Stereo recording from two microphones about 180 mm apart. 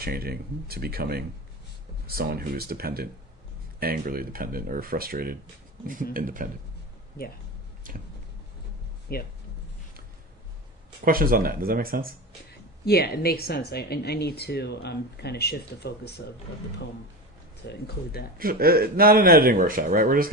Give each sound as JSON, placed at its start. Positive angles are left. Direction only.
{"t": 0.0, "sound": "speech", "side_deg": -60}
{"t": 9.1, "sound": "a woman's voice", "side_deg": 60}
{"t": 11.0, "sound": "speech", "side_deg": -55}
{"t": 12.5, "sound": "a woman's voice", "side_deg": 60}
{"t": 17.7, "sound": "a woman's voice", "side_deg": 60}
{"t": 18.3, "sound": "speech", "side_deg": -55}